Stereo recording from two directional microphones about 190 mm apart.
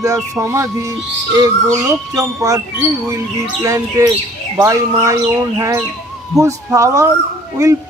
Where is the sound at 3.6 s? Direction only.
15° right (ahead or behind).